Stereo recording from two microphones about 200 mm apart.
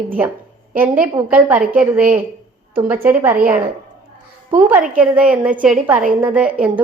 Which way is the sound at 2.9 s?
10° right (ahead or behind).